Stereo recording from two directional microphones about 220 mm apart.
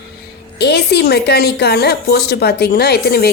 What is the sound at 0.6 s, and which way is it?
A woman's voice, 50° left (ahead or behind).